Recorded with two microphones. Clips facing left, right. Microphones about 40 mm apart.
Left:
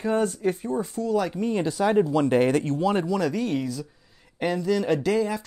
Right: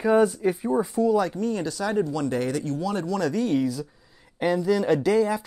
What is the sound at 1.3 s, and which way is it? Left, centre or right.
Speech, left.